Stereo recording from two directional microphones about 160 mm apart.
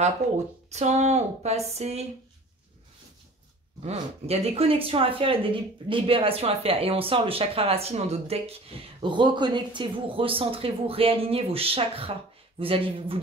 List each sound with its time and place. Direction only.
0.7 s speech: 45° right (ahead or behind)
3.8 s speech: 40° right (ahead or behind)